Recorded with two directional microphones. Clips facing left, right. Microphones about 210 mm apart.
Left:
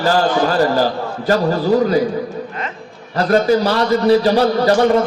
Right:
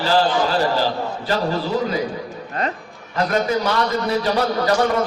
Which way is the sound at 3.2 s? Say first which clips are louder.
Left 6 dB; 35° left (ahead or behind).